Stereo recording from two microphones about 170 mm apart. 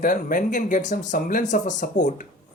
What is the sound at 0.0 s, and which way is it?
Speech, 55° left (ahead or behind).